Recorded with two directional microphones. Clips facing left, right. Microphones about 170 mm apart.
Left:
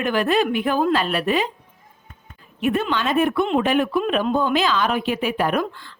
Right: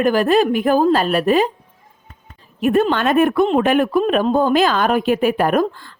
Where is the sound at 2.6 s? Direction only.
45° right (ahead or behind).